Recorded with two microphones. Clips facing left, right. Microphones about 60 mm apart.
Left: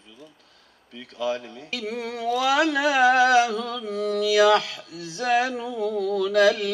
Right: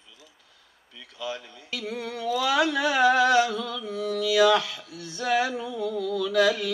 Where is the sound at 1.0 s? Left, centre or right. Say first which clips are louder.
Left 7 dB; left.